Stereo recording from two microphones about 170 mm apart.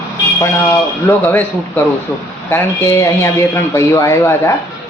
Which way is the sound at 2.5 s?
15° left (ahead or behind).